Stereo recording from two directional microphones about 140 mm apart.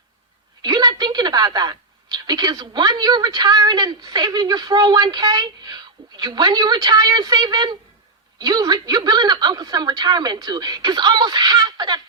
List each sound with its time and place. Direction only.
0.6 s a woman's voice: 30° right (ahead or behind)